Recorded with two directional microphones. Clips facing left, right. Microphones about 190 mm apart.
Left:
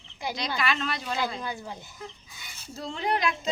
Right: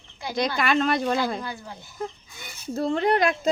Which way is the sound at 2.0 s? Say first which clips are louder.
Right 9 dB; 50° right (ahead or behind).